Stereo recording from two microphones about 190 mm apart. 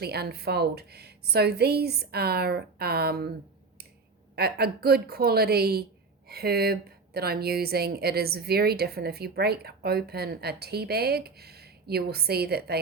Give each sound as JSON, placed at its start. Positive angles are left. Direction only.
{"t": 0.0, "sound": "speech", "side_deg": -55}
{"t": 4.4, "sound": "speech", "side_deg": -55}